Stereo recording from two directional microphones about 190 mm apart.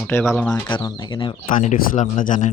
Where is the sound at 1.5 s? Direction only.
45° left (ahead or behind).